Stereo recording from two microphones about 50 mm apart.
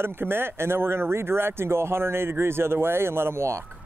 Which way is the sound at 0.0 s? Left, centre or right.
Right.